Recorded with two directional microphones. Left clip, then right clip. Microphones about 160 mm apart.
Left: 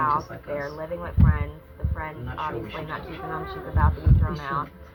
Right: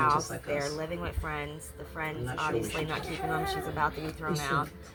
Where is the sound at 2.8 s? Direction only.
20° right (ahead or behind).